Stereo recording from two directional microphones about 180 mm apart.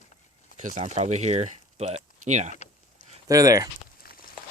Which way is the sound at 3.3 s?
20° right (ahead or behind).